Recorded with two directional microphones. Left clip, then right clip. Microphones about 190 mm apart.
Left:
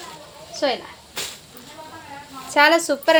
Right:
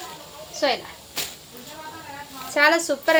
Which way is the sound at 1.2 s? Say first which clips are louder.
Left 1 dB; 5° right (ahead or behind).